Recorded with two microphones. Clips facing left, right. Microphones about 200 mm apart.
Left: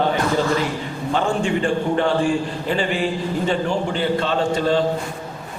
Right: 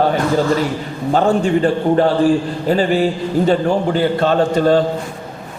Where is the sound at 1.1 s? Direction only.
40° right (ahead or behind).